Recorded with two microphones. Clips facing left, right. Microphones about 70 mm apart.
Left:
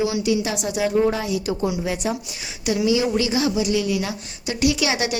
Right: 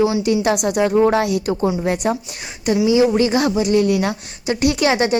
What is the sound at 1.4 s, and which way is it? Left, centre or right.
Speech, right.